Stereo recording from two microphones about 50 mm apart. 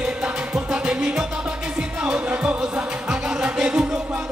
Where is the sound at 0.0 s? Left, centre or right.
Right.